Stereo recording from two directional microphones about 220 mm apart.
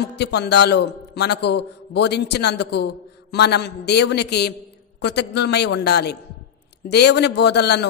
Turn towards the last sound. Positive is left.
turn(degrees=50)  # may be behind; listen again after turning